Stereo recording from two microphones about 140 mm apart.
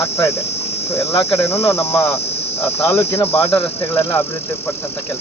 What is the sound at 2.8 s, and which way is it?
Speech, 15° left (ahead or behind).